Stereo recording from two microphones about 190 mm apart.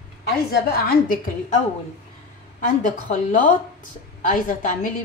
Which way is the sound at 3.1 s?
45° left (ahead or behind).